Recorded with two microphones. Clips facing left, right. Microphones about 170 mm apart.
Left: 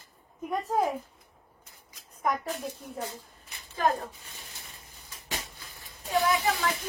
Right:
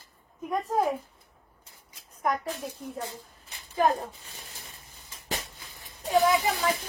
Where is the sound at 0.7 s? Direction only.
Centre (ahead or behind).